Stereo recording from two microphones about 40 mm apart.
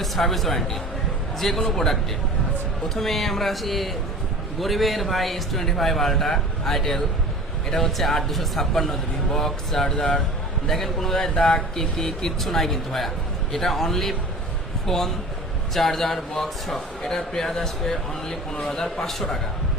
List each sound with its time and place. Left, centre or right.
0.0 s a man's voice: centre
9.9 s speech: left
10.7 s a man's voice: centre
11.3 s a man's voice: centre